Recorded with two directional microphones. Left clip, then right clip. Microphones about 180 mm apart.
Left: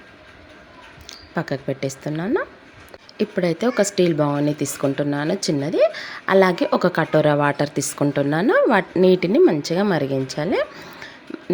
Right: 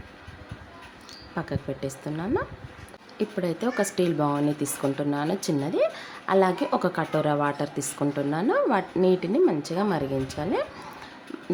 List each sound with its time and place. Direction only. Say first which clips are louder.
1.4 s speech: left 7 dB; 30° left (ahead or behind)